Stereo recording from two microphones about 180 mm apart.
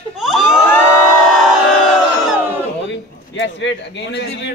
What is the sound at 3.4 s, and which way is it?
A man's voice, 85° left.